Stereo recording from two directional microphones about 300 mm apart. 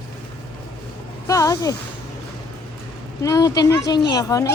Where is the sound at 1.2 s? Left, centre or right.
Centre.